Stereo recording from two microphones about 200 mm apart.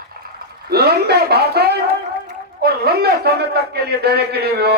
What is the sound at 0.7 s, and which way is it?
A man's voice, 50° right (ahead or behind).